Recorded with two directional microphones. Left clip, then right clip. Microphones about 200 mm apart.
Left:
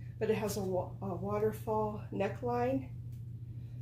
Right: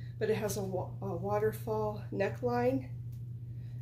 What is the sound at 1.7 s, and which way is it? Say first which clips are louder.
Speech: even; 25° right (ahead or behind).